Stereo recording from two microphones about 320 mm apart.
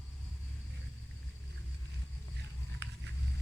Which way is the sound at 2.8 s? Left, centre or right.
Right.